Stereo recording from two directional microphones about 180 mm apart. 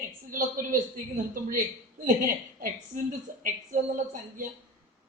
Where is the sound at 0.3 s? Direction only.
50° right (ahead or behind).